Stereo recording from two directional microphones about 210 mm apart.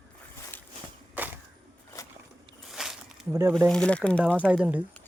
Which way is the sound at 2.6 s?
Centre (ahead or behind).